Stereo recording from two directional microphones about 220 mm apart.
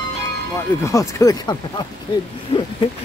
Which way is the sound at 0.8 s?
15° left (ahead or behind).